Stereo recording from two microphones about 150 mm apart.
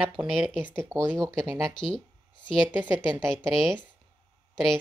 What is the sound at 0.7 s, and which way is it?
Speech, 20° right (ahead or behind).